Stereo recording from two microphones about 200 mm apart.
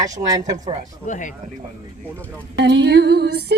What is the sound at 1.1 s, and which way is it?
Speech, 40° left (ahead or behind).